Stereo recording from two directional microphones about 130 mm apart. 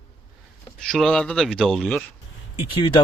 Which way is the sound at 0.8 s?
5° left (ahead or behind).